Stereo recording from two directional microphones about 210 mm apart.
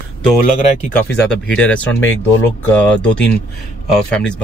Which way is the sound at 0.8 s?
55° left (ahead or behind).